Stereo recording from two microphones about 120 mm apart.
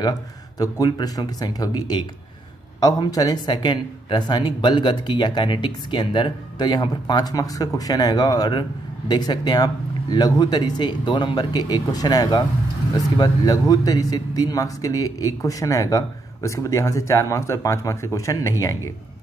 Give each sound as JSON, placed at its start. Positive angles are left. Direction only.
{"t": 0.6, "sound": "speech", "side_deg": 35}